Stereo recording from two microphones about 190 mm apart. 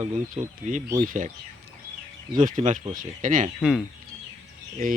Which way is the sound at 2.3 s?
45° right (ahead or behind).